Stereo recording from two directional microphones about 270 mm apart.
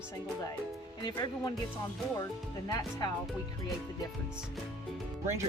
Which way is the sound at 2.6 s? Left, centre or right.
Centre.